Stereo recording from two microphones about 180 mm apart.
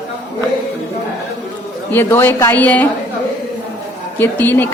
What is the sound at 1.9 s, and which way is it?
Speech, 10° left (ahead or behind).